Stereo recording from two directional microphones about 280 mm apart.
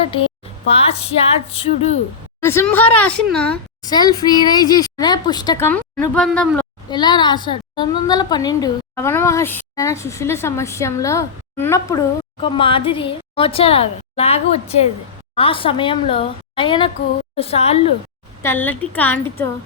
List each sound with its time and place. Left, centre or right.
0.7 s a woman's voice: left
2.4 s a woman's voice: centre
6.9 s a woman's voice: centre
18.4 s a woman's voice: centre